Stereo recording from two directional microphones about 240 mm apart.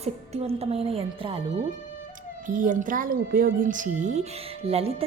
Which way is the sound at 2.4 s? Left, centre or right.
Right.